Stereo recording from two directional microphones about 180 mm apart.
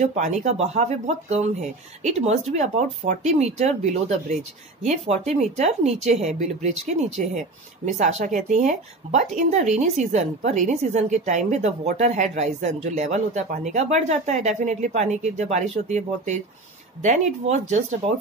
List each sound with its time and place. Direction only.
0.0 s speech: 40° right (ahead or behind)